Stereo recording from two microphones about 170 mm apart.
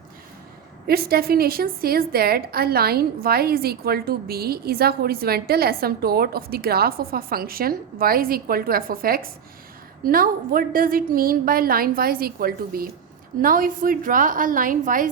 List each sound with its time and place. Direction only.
0.9 s a woman's voice: 65° right (ahead or behind)